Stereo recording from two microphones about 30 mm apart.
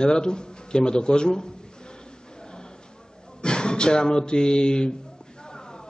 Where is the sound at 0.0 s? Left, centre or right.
Left.